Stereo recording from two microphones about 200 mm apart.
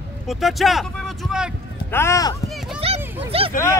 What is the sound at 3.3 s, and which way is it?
Speech, 30° right (ahead or behind).